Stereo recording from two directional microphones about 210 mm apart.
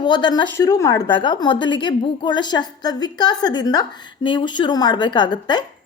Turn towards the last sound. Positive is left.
turn(degrees=20)  # may be behind; listen again after turning